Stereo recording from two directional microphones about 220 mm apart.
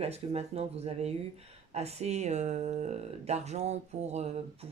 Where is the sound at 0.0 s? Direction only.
30° right (ahead or behind).